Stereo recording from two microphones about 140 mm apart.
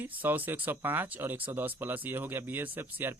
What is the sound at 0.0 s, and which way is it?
Speech, 15° right (ahead or behind).